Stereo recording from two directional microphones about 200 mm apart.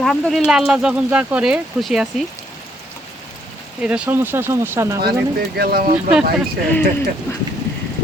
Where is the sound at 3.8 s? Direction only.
5° right (ahead or behind).